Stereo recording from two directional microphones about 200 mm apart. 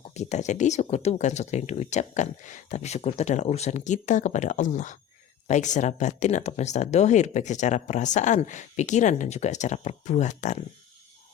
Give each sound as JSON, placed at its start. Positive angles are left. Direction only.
{"t": 0.2, "sound": "speech", "side_deg": 35}